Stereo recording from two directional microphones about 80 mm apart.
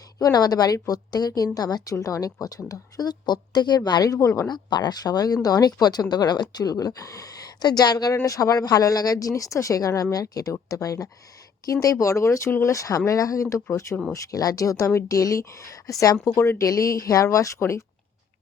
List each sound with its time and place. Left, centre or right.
0.2 s speech: left
4.4 s speech: left
16.2 s speech: left
16.6 s speech: left